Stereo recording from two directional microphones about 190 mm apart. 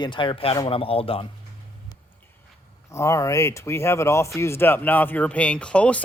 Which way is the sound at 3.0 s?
15° left (ahead or behind).